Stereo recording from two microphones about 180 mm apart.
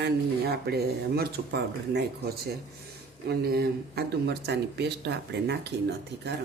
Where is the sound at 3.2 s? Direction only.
60° right (ahead or behind).